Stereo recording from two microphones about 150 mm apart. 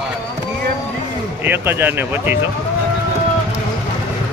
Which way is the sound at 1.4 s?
15° right (ahead or behind).